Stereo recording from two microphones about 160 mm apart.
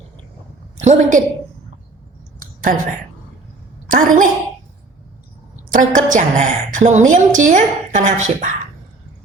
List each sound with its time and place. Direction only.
0.8 s a woman's voice: 45° right (ahead or behind)
2.4 s a sound: 60° right (ahead or behind)
3.8 s a woman's voice: 55° right (ahead or behind)
5.5 s a woman's voice: 55° right (ahead or behind)